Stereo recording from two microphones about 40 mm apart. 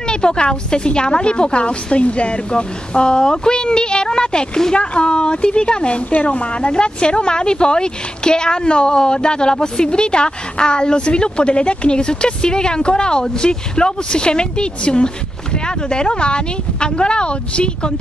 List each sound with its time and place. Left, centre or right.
0.1 s a woman's voice: left